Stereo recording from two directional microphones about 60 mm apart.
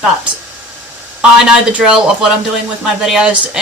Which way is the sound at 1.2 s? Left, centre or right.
Centre.